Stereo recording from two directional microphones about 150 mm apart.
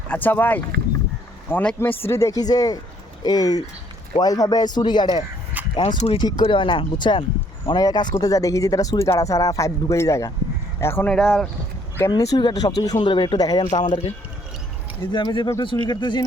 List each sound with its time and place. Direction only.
0.1 s a man's voice: 10° left (ahead or behind)
11.1 s speech: 5° left (ahead or behind)
12.1 s speech: 25° left (ahead or behind)
15.1 s speech: 30° left (ahead or behind)